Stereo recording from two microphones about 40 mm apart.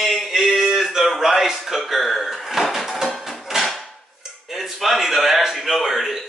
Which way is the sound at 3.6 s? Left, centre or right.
Centre.